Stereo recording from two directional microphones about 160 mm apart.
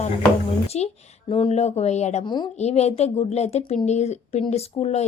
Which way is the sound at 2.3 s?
25° left (ahead or behind).